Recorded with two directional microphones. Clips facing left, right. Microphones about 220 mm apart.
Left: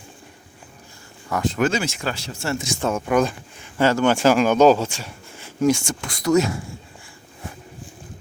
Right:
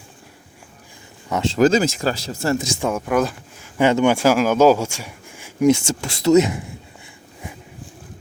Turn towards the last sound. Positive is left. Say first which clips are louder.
# right 4 dB
turn(degrees=-20)  # may be behind; listen again after turning